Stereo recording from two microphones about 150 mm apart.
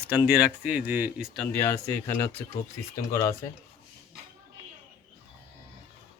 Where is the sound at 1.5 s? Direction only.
15° left (ahead or behind).